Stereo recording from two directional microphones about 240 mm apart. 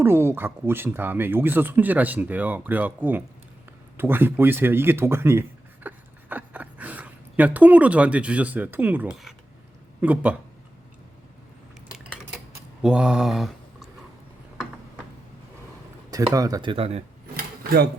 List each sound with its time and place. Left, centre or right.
0.0 s speech: centre
12.8 s mantra: centre
16.0 s speech: centre
17.3 s drawer open or close: right